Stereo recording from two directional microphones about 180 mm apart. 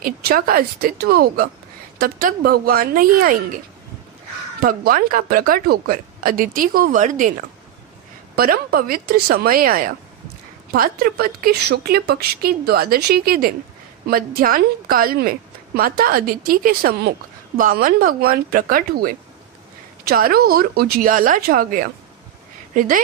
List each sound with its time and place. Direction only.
0.0 s a woman's voice: 55° right (ahead or behind)
8.4 s a woman's voice: 55° right (ahead or behind)